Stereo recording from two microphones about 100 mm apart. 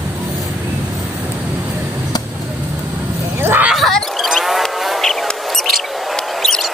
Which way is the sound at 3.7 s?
Centre (ahead or behind).